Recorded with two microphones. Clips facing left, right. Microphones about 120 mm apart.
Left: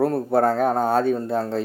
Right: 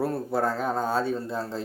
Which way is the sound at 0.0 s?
55° left (ahead or behind).